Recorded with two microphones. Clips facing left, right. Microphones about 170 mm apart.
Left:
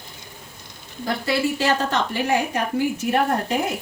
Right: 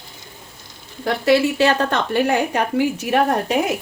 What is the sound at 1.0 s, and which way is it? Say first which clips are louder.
A woman's voice: right 6 dB; 75° right (ahead or behind).